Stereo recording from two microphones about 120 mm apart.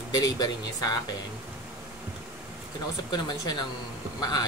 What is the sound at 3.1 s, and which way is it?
A woman's voice, 35° left (ahead or behind).